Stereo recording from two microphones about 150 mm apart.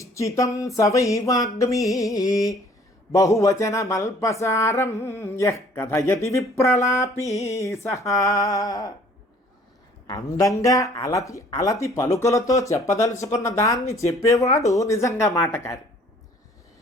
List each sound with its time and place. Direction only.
0.0 s speech: 20° left (ahead or behind)
10.1 s speech: 25° left (ahead or behind)